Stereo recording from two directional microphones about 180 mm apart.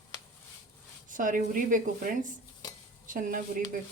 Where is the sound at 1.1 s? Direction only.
50° right (ahead or behind).